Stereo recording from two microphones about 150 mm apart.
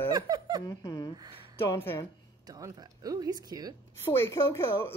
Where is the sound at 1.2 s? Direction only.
35° right (ahead or behind).